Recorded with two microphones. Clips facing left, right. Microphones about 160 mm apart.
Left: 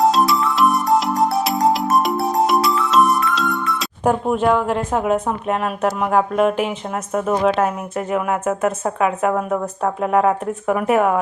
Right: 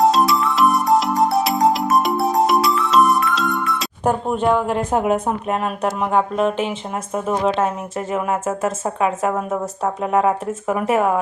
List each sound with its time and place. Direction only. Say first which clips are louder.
0.0 s music: even; centre (ahead or behind)
3.7 s speech: left 1 dB; centre (ahead or behind)
4.9 s a woman's voice: right 1 dB; 10° right (ahead or behind)
5.6 s speech: left 1 dB; centre (ahead or behind)
7.4 s speech: left 2 dB; 25° right (ahead or behind)